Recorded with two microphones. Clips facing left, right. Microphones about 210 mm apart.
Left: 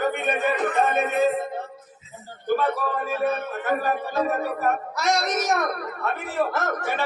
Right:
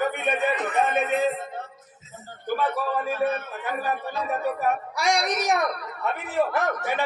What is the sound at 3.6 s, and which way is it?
Speech, 50° left (ahead or behind).